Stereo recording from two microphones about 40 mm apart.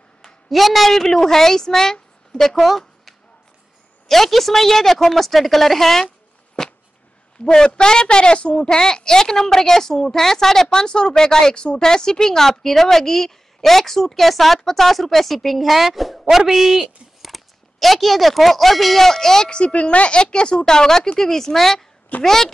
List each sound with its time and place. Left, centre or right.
0.2 s a woman's voice: centre
4.1 s a woman's voice: centre
6.0 s a sound: left
7.5 s a woman's voice: centre
17.3 s a woman's voice: centre